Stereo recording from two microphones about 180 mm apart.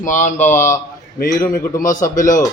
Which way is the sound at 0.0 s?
45° left (ahead or behind).